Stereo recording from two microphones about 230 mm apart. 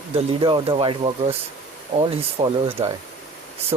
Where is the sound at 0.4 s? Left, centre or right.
Right.